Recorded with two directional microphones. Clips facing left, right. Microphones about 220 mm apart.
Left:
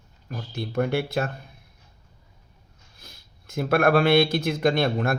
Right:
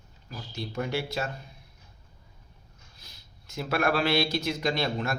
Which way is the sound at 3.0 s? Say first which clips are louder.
Left 8 dB; 50° left (ahead or behind).